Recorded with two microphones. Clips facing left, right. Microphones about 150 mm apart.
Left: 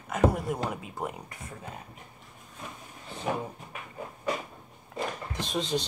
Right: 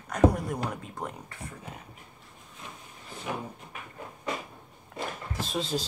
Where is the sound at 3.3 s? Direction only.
45° left (ahead or behind).